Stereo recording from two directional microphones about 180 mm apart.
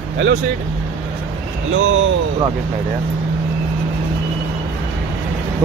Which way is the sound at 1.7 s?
90° right.